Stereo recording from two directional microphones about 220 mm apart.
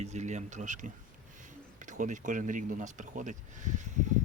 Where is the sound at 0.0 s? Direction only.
30° right (ahead or behind).